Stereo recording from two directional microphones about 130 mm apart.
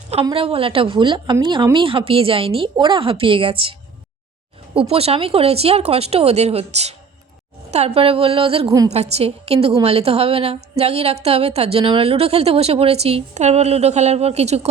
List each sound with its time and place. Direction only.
0.3 s a woman's voice: 45° right (ahead or behind)